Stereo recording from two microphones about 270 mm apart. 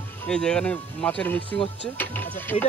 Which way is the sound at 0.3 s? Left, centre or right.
Centre.